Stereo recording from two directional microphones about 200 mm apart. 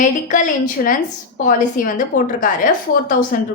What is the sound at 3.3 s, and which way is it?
Speech, 45° left (ahead or behind).